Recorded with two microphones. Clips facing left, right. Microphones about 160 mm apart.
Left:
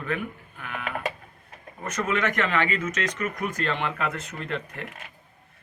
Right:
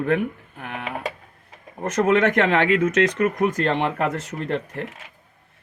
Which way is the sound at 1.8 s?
55° right (ahead or behind).